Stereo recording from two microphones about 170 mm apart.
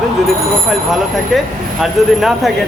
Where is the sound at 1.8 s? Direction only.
Centre (ahead or behind).